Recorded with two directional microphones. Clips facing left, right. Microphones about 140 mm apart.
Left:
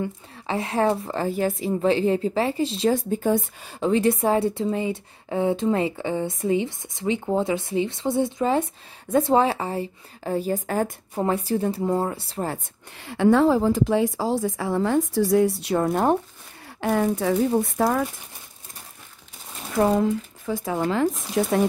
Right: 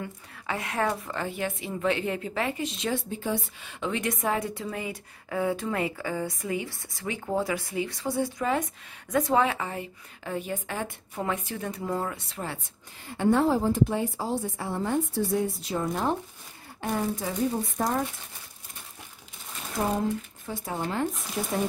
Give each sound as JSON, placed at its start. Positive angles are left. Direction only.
{"t": 0.0, "sound": "a woman's voice", "side_deg": 30}
{"t": 3.1, "sound": "a woman's voice", "side_deg": 45}
{"t": 13.0, "sound": "a woman's voice", "side_deg": 90}
{"t": 16.8, "sound": "speech", "side_deg": 75}
{"t": 19.8, "sound": "speech", "side_deg": 75}
{"t": 20.6, "sound": "a woman's voice", "side_deg": 90}
{"t": 21.4, "sound": "speech", "side_deg": 75}